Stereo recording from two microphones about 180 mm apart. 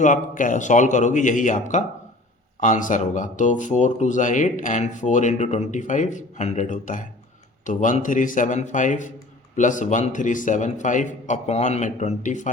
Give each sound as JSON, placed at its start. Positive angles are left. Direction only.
{"t": 0.0, "sound": "speech", "side_deg": 45}